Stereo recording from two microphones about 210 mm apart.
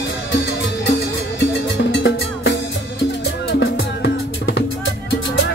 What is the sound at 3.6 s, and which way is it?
Music, 60° left (ahead or behind).